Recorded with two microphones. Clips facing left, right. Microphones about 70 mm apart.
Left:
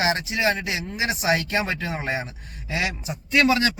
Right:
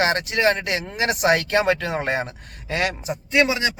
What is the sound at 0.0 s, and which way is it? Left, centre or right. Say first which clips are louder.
Speech: right 3 dB; right.